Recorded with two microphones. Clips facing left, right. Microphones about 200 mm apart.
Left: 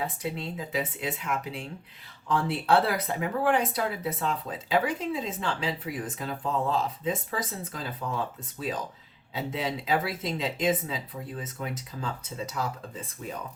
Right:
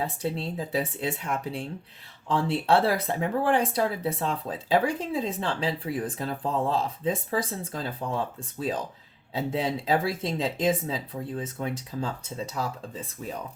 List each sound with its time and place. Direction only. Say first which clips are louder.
0.0 s speech: right 3 dB; 30° right (ahead or behind)
9.3 s speech: right 4 dB; 30° right (ahead or behind)